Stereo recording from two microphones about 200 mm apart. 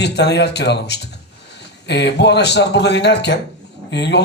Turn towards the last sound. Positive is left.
turn(degrees=60)  # may be behind; listen again after turning